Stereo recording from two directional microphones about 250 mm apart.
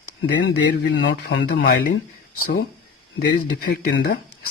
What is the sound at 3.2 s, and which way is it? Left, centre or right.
Speech, left.